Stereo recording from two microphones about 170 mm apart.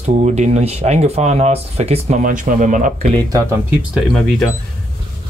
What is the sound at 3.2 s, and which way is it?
Speech, 20° right (ahead or behind).